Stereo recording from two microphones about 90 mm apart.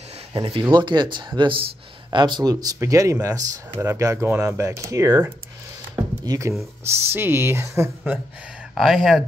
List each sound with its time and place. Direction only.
0.3 s speech: 70° right (ahead or behind)
2.0 s speech: 55° right (ahead or behind)
2.5 s speech: 45° right (ahead or behind)
6.2 s speech: 40° right (ahead or behind)
6.8 s speech: 25° right (ahead or behind)
8.7 s speech: centre (ahead or behind)